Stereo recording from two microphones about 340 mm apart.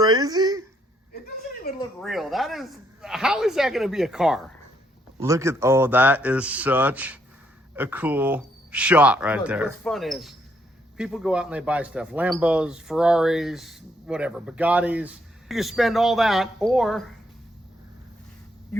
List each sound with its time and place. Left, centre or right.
0.0 s a sound: centre
1.7 s speech: left
2.0 s speech: centre